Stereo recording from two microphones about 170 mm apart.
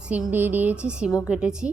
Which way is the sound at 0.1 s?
10° right (ahead or behind).